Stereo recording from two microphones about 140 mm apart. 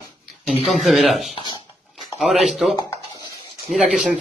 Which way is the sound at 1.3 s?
30° left (ahead or behind).